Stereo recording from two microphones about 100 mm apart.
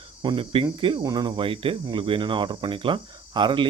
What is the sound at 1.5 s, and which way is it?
Speech, 60° right (ahead or behind).